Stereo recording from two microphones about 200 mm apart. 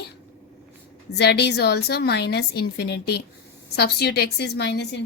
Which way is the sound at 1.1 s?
55° left (ahead or behind).